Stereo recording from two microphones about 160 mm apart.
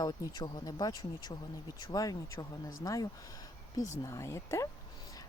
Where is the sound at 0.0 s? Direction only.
25° left (ahead or behind).